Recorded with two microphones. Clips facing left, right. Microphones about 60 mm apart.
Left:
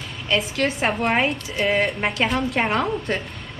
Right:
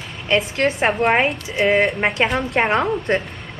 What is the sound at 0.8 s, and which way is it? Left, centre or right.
Speech, centre.